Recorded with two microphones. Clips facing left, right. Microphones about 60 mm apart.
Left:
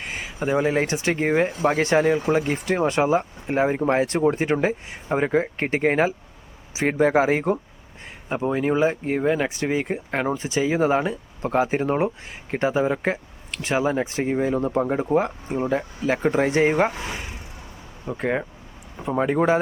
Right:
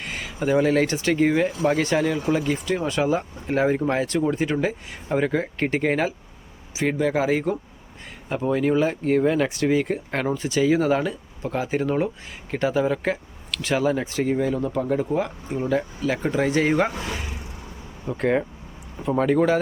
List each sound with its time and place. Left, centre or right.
0.0 s a sound: left
0.3 s speech: centre; by 3.2 s left
3.4 s speech: centre
3.8 s speech: left
8.3 s speech: centre
11.4 s speech: left
16.0 s speech: left
18.0 s speech: centre